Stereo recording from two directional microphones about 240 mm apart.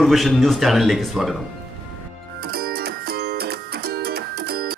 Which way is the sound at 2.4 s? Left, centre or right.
Right.